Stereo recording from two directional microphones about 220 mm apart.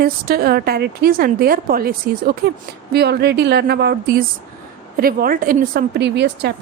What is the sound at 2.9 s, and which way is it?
A woman's voice, 45° right (ahead or behind).